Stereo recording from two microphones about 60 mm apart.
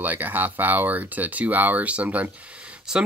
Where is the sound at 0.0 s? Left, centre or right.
Right.